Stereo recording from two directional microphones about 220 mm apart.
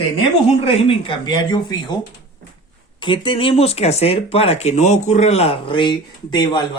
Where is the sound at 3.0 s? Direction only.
20° left (ahead or behind).